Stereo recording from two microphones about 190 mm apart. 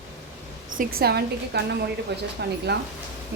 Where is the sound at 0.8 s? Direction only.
55° right (ahead or behind).